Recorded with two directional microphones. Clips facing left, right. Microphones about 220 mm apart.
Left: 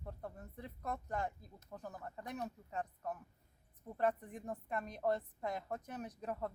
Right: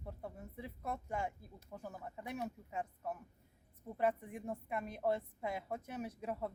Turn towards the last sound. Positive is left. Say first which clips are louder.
# right 1 dB
turn(degrees=-10)  # may be behind; listen again after turning